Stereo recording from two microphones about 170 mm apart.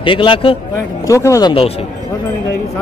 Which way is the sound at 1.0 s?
20° left (ahead or behind).